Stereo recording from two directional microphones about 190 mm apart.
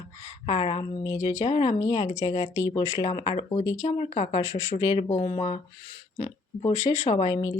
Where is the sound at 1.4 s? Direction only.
30° left (ahead or behind).